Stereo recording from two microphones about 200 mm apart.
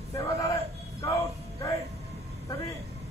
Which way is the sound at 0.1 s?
15° left (ahead or behind).